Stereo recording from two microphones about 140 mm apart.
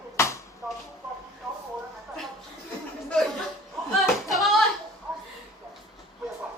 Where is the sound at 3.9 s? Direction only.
Centre (ahead or behind).